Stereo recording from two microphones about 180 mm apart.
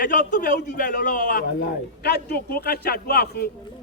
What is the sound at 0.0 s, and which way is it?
A man's voice, 45° left (ahead or behind).